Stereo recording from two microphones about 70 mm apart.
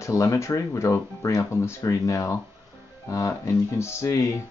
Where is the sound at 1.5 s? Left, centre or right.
Left.